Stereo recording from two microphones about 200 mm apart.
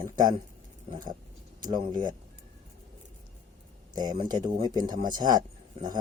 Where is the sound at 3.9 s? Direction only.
20° right (ahead or behind).